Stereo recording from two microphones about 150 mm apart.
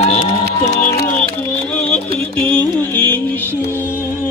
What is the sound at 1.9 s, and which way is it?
Music, 10° left (ahead or behind).